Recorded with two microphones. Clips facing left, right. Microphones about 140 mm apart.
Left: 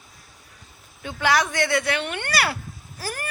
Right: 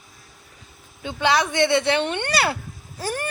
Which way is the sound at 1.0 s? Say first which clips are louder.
Right 1 dB; 20° right (ahead or behind).